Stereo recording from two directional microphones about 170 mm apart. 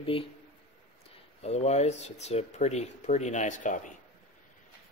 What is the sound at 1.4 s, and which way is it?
Speech, 40° left (ahead or behind).